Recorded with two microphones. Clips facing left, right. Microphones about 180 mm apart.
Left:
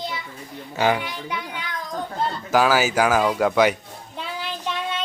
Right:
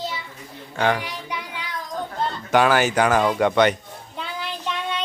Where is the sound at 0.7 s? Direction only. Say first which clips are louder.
Left 1 dB; 5° left (ahead or behind).